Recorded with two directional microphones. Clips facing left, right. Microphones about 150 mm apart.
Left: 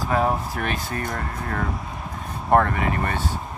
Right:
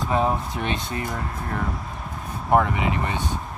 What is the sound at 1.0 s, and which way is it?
Speech, 5° right (ahead or behind).